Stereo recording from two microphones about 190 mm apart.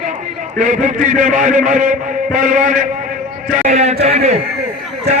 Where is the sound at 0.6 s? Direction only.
40° right (ahead or behind).